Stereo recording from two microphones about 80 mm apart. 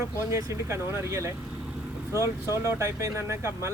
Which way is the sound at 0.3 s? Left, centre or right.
Right.